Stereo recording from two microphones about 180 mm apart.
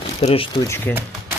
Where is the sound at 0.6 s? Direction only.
15° left (ahead or behind).